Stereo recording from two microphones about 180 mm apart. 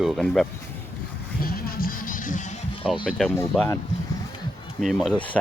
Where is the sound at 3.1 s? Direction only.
Centre (ahead or behind).